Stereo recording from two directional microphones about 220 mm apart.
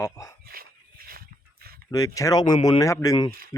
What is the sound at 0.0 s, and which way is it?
Speech, 15° left (ahead or behind).